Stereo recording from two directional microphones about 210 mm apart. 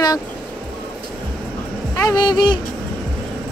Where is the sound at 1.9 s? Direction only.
15° left (ahead or behind).